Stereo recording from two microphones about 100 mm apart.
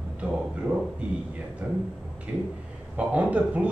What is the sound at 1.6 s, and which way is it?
Speech, 15° right (ahead or behind).